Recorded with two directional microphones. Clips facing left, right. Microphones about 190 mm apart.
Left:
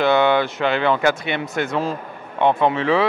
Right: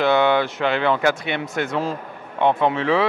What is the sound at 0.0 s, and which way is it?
Speech, 10° left (ahead or behind).